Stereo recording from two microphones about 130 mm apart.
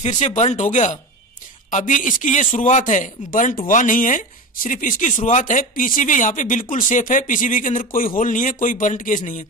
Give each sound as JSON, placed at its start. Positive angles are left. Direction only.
{"t": 0.0, "sound": "a man's voice", "side_deg": 60}